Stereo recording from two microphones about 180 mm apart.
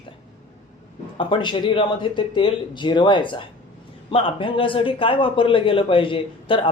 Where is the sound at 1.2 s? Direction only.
25° left (ahead or behind).